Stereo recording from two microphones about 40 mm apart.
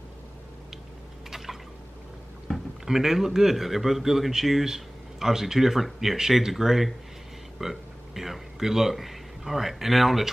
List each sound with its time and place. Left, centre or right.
1.3 s drip: centre
2.5 s a man's voice: centre